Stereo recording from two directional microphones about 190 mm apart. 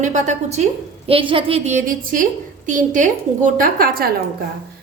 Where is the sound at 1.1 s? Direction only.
25° right (ahead or behind); by 4.1 s 50° right (ahead or behind).